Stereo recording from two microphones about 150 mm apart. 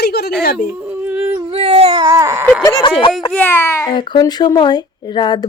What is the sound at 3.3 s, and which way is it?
Speech, 10° left (ahead or behind).